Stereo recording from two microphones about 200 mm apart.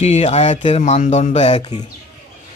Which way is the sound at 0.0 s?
35° left (ahead or behind).